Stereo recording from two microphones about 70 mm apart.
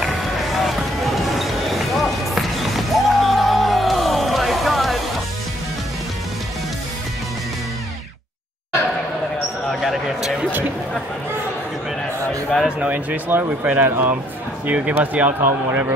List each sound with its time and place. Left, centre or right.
0.0 s basketball bounce: centre
9.8 s basketball bounce: centre
12.6 s speech: right
14.7 s speech: centre